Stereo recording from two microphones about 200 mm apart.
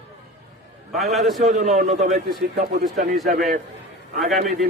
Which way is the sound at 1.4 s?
35° right (ahead or behind).